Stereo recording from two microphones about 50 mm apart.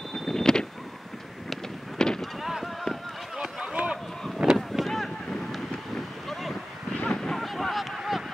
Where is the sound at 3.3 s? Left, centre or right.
Centre.